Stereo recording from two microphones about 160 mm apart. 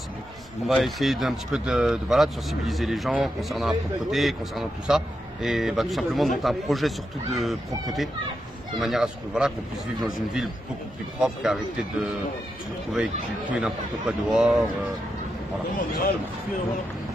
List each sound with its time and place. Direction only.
0.7 s speech: centre (ahead or behind)
15.7 s speech: 65° left (ahead or behind)